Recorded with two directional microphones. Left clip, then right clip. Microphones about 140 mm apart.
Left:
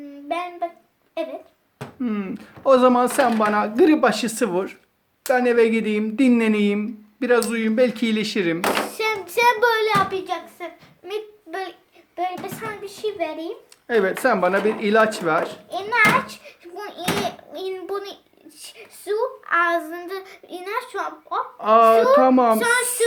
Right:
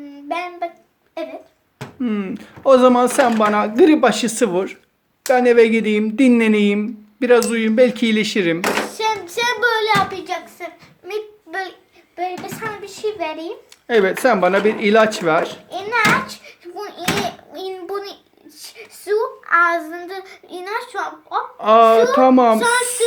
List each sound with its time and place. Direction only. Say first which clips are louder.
0.3 s child singing: right 2 dB; 35° left (ahead or behind)
2.0 s speech: right 4 dB; 15° right (ahead or behind)
8.9 s a sound: right 3 dB; 50° left (ahead or behind)
10.1 s a sound: right 1 dB; 15° left (ahead or behind)
13.2 s speech: right 3 dB; centre (ahead or behind)
13.8 s speech: right 4 dB; 20° right (ahead or behind)
15.8 s children playing: right 1 dB; 30° left (ahead or behind)
17.2 s a sound: right 1 dB; 30° left (ahead or behind)
19.0 s a woman's voice: right 4 dB; 15° left (ahead or behind)
19.5 s child singing: right 5 dB; 30° left (ahead or behind)
21.6 s speech: right 3 dB; 20° right (ahead or behind)
22.5 s a sound: right 3 dB; 55° left (ahead or behind)